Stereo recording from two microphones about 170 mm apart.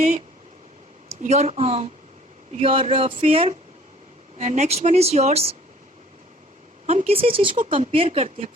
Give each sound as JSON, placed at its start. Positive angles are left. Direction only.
{"t": 1.2, "sound": "speech", "side_deg": -40}
{"t": 6.8, "sound": "speech", "side_deg": -40}